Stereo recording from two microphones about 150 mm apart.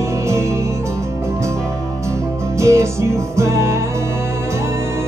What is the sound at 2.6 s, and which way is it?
Music, 20° right (ahead or behind).